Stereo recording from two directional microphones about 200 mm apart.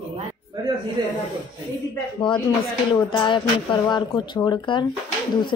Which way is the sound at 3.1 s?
25° left (ahead or behind).